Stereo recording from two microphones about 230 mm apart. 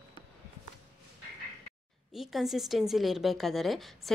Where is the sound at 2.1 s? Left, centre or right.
Centre.